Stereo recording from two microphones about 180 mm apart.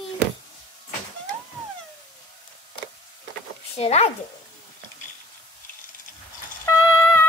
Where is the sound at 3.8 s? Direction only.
35° left (ahead or behind).